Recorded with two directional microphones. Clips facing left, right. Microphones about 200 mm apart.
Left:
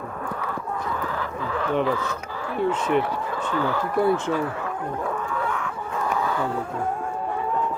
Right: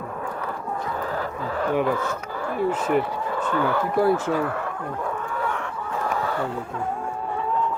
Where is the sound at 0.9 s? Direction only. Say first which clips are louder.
Right 1 dB; 40° right (ahead or behind).